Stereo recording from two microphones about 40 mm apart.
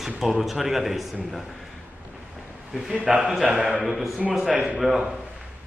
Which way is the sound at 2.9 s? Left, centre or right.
Right.